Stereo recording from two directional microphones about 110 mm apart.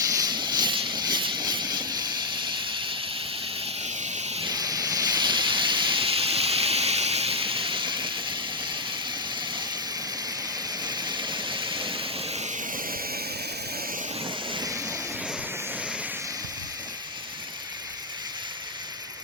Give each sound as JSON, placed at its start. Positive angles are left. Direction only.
{"t": 0.0, "sound": "vehicle", "side_deg": -35}
{"t": 3.8, "sound": "a sound", "side_deg": -90}
{"t": 4.4, "sound": "hiss", "side_deg": -35}
{"t": 10.8, "sound": "vehicle", "side_deg": -40}